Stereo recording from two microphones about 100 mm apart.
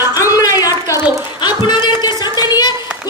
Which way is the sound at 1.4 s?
50° left (ahead or behind).